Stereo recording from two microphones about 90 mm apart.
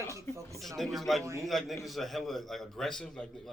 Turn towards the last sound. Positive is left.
turn(degrees=10)  # may be behind; listen again after turning